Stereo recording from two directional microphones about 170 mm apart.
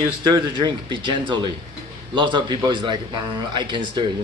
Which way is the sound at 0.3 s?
25° right (ahead or behind).